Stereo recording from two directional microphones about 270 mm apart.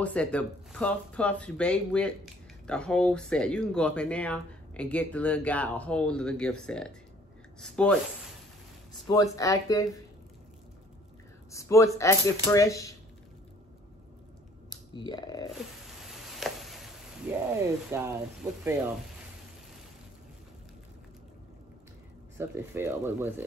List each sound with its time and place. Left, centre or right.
0.0 s speech: centre
11.5 s speech: centre
14.7 s speech: centre
15.5 s a sound: centre
17.9 s speech: centre
22.4 s speech: centre